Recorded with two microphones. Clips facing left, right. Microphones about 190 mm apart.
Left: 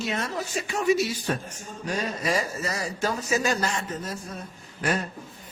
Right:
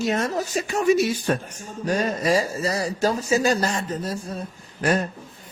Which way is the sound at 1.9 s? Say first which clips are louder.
Right 6 dB; 35° right (ahead or behind).